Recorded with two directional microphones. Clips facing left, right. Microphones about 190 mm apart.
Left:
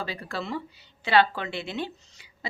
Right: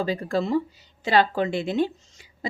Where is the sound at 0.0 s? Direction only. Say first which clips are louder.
Right 9 dB; 45° right (ahead or behind).